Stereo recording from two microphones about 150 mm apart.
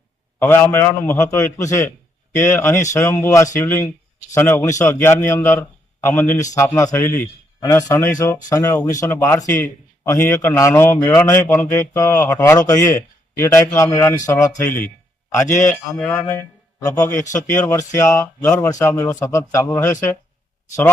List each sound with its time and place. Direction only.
0.3 s a man's voice: 15° left (ahead or behind)